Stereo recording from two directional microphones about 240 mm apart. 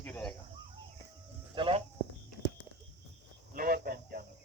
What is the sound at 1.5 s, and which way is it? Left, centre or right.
Speech, right.